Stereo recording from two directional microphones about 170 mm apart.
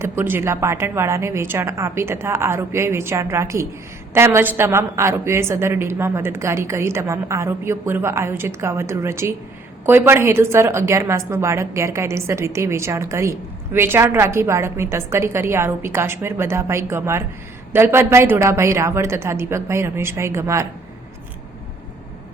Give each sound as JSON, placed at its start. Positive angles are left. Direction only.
{"t": 0.0, "sound": "a woman's voice", "side_deg": -15}